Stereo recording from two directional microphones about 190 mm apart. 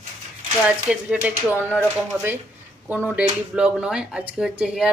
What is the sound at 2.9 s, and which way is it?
Speech, 10° right (ahead or behind).